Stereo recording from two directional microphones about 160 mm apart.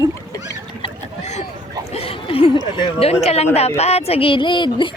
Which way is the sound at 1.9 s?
35° left (ahead or behind).